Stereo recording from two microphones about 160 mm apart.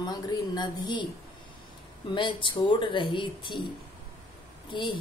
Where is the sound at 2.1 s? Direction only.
30° left (ahead or behind).